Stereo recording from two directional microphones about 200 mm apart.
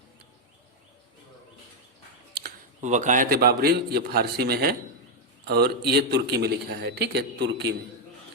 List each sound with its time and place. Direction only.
2.8 s a man's voice: 35° right (ahead or behind); by 7.8 s 55° right (ahead or behind)